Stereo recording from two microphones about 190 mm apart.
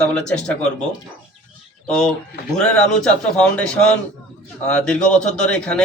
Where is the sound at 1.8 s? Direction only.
5° left (ahead or behind).